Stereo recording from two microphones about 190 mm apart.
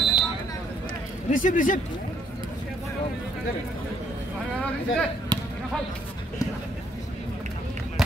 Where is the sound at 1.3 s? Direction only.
45° left (ahead or behind).